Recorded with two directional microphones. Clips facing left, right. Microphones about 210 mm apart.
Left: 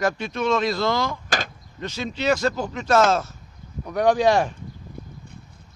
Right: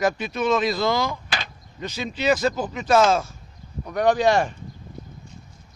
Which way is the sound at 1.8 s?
15° right (ahead or behind).